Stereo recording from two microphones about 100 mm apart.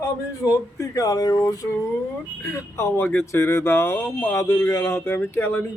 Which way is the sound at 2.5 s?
25° left (ahead or behind).